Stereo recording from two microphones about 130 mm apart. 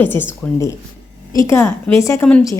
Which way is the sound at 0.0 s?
15° left (ahead or behind).